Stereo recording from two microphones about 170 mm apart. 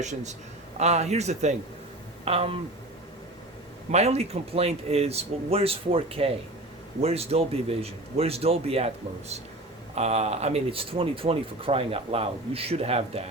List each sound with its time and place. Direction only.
0.0 s a man's voice: 45° right (ahead or behind)
3.9 s speech: 40° right (ahead or behind)
9.9 s speech: 40° right (ahead or behind)